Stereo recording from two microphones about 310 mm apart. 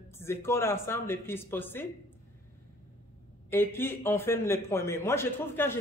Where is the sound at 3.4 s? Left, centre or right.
Centre.